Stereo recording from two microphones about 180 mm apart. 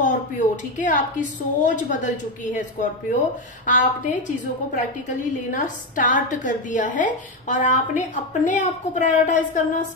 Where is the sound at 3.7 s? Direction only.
45° left (ahead or behind).